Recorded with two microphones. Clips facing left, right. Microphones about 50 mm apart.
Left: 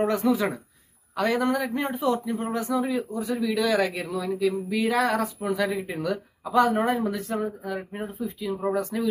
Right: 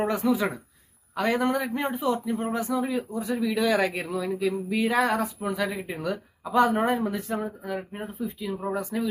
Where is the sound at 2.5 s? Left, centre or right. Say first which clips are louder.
Left 2 dB; right.